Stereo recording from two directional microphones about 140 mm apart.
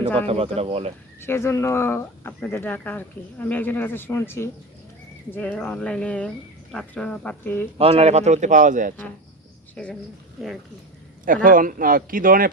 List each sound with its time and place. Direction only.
0.2 s speech: 45° right (ahead or behind)
1.2 s speech: 20° left (ahead or behind)
7.8 s a man's voice: 45° right (ahead or behind); by 9.0 s 70° right (ahead or behind)
9.7 s speech: 5° left (ahead or behind)
11.4 s speech: 80° right